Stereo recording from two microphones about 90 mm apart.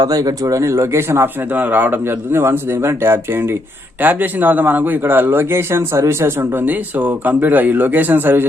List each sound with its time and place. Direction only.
0.0 s speech: 45° right (ahead or behind); by 8.4 s 20° right (ahead or behind)